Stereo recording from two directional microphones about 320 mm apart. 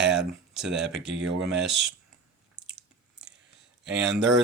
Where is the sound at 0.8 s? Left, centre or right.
Right.